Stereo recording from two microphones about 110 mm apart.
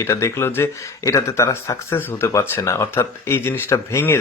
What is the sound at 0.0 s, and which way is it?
Speech, 25° left (ahead or behind).